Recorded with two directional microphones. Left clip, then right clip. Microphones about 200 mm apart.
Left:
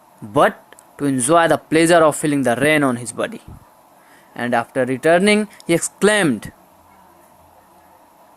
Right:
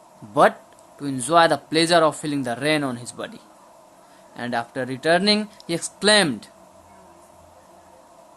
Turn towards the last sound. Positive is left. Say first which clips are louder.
# left 2 dB
turn(degrees=30)  # may be behind; listen again after turning